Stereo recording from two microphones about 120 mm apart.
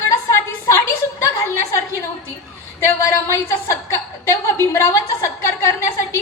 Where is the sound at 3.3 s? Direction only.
25° left (ahead or behind).